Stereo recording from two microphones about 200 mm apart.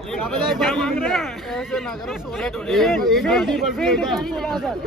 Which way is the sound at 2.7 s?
Centre (ahead or behind).